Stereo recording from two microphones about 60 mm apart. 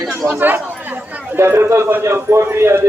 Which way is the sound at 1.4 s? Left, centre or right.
Right.